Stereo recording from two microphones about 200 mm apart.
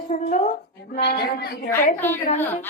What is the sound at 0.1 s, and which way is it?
Speech, 35° left (ahead or behind).